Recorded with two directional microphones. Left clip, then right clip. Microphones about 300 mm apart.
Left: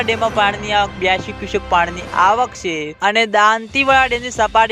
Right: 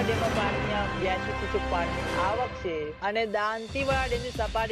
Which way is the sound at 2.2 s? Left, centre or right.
Left.